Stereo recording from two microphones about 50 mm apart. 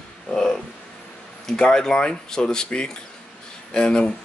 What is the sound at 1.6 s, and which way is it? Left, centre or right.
Speech, centre.